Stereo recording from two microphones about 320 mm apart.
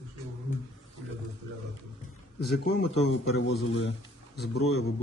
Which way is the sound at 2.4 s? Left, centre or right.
Left.